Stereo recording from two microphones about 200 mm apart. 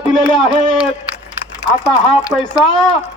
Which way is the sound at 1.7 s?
5° right (ahead or behind).